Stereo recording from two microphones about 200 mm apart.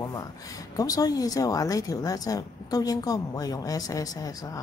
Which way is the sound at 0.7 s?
20° left (ahead or behind).